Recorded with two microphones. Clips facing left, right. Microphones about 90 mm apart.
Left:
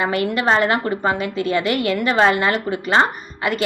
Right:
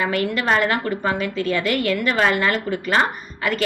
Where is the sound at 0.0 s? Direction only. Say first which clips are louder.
Left 2 dB; 20° left (ahead or behind).